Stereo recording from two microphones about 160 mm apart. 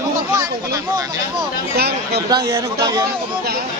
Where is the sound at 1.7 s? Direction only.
85° right.